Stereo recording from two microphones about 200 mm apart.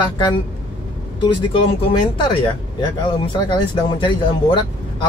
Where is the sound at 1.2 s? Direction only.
25° left (ahead or behind).